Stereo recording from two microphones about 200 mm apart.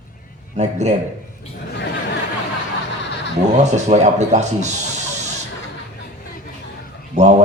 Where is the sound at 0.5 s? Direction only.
35° right (ahead or behind).